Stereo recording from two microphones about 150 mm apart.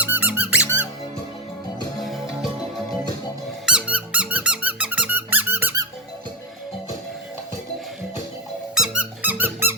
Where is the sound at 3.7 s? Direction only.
5° right (ahead or behind).